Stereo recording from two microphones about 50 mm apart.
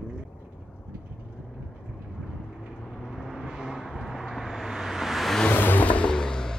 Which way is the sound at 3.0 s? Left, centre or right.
Centre.